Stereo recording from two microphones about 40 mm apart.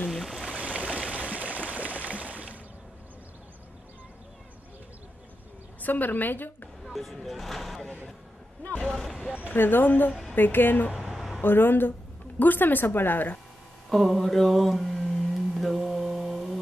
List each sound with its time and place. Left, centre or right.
0.1 s a sound: centre
0.5 s stream: right
1.7 s a sound: right
5.8 s a woman's voice: left
6.9 s speech: centre
8.9 s speech: centre
9.5 s speech: left
11.1 s a sound: centre
11.4 s speech: left
12.4 s speech: left
13.8 s mantra: centre